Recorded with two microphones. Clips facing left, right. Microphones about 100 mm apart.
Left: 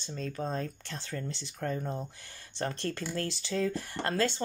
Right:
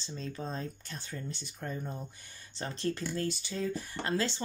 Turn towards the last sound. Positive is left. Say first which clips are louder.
# left 2 dB
turn(degrees=55)  # may be behind; listen again after turning